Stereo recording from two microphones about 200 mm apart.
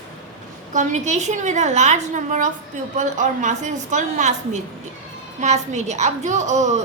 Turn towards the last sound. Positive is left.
turn(degrees=-35)  # may be behind; listen again after turning